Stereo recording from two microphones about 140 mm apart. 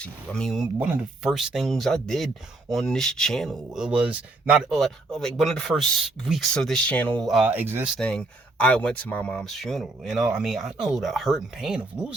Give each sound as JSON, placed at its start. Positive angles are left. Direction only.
{"t": 0.0, "sound": "speech", "side_deg": 5}
{"t": 7.5, "sound": "speech", "side_deg": -15}
{"t": 7.9, "sound": "speech", "side_deg": 5}